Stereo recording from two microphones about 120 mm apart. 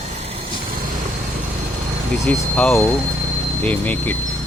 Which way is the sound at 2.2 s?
10° left (ahead or behind).